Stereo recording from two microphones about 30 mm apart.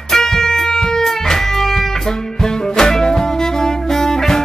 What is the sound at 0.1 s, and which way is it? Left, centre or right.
Music, centre.